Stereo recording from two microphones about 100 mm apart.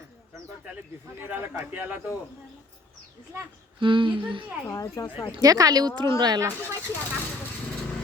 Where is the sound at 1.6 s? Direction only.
15° right (ahead or behind).